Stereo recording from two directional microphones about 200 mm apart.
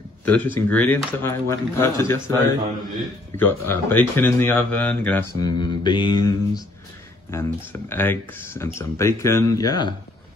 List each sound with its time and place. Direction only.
0.2 s speech: 10° left (ahead or behind)
3.3 s speech: 10° left (ahead or behind)
5.4 s speech: 25° left (ahead or behind)